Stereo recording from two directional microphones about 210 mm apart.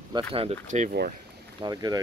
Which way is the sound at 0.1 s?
25° right (ahead or behind).